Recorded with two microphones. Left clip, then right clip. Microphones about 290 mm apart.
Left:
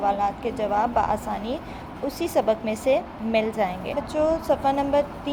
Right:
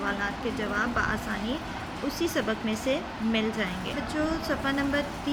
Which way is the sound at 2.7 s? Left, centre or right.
Centre.